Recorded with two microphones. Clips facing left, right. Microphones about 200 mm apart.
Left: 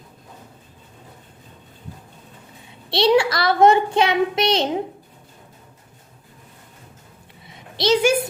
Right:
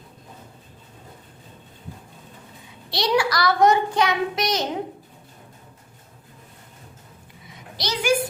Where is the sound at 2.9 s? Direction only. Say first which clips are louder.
Left 5 dB; 25° left (ahead or behind).